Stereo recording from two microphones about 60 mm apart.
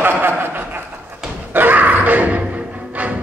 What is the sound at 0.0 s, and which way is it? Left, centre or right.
Chuckle, right.